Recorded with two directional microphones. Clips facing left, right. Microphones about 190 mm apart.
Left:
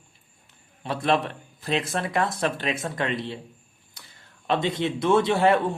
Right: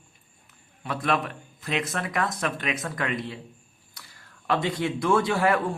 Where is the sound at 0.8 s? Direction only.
30° left (ahead or behind).